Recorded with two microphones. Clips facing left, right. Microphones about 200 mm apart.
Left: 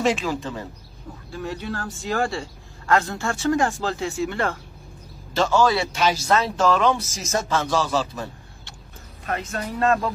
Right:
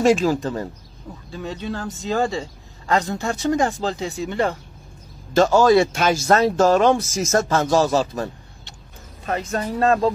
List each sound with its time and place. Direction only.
0.0 s speech: 40° right (ahead or behind)
1.3 s speech: 20° right (ahead or behind)
5.3 s speech: 45° right (ahead or behind)
9.2 s speech: 30° right (ahead or behind)